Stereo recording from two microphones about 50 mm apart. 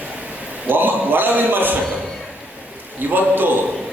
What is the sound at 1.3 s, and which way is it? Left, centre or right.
Speech, right.